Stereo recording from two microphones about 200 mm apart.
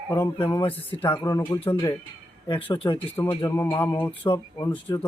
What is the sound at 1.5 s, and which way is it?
Speech, 25° left (ahead or behind).